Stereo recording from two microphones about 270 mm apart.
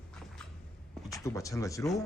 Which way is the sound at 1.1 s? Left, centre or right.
Centre.